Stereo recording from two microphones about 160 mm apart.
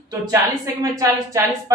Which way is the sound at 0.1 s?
20° right (ahead or behind).